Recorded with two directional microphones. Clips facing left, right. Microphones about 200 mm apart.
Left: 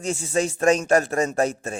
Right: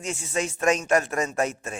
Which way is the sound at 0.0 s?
35° left (ahead or behind).